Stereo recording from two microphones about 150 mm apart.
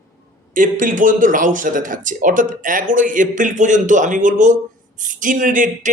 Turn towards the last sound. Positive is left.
turn(degrees=-60)  # may be behind; listen again after turning